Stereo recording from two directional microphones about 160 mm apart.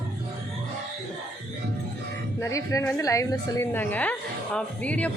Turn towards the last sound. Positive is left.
turn(degrees=10)  # may be behind; listen again after turning